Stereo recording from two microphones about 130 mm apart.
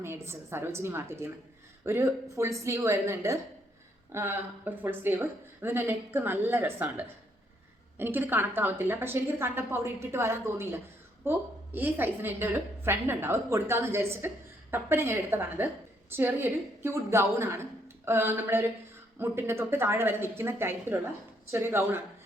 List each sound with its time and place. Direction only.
0.0 s a woman's voice: 20° right (ahead or behind)